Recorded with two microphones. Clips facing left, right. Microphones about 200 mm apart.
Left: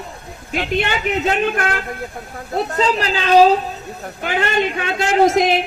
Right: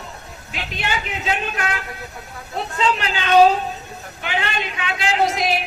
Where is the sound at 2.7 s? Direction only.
35° left (ahead or behind).